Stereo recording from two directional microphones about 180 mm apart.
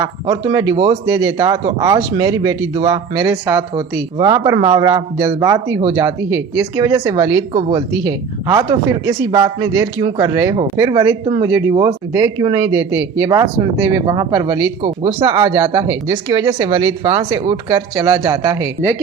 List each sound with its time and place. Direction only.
0.0 s speech: 20° right (ahead or behind)
14.8 s speech: 30° right (ahead or behind)